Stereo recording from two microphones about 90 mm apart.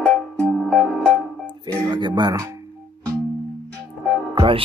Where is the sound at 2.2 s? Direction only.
50° right (ahead or behind).